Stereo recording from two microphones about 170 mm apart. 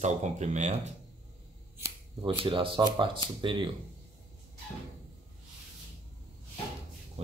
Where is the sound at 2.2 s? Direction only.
30° right (ahead or behind).